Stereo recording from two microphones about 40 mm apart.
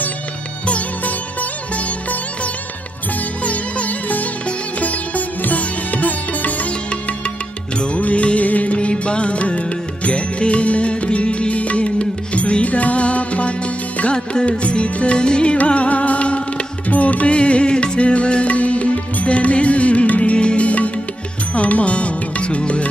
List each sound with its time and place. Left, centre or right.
0.7 s music: left
3.4 s music: left
8.7 s music: left
15.5 s music: left
16.9 s music: left
17.3 s music: left